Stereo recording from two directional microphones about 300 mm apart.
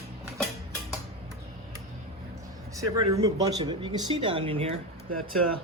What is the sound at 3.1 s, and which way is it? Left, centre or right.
Speech, centre.